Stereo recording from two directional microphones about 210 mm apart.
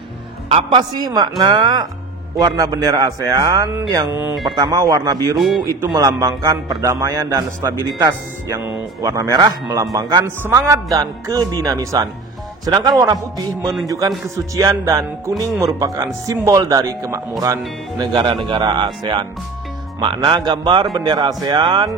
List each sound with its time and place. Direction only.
0.5 s a man's voice: 20° right (ahead or behind)